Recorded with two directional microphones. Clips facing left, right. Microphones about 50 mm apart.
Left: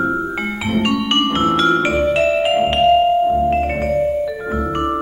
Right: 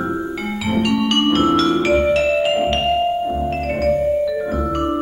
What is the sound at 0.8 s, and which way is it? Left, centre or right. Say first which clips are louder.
Music: even; left.